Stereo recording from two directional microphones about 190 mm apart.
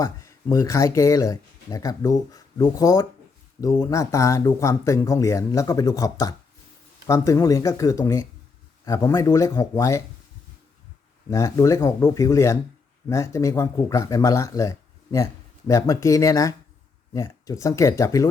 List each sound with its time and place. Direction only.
0.0 s speech: 15° left (ahead or behind)
11.3 s speech: 15° left (ahead or behind)